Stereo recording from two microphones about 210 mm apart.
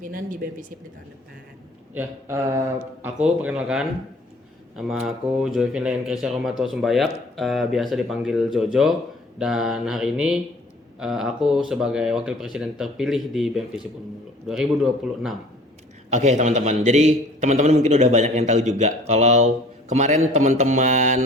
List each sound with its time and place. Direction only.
0.0 s a man's voice: 40° right (ahead or behind)
1.9 s a man's voice: 10° right (ahead or behind)
16.0 s a man's voice: 35° right (ahead or behind)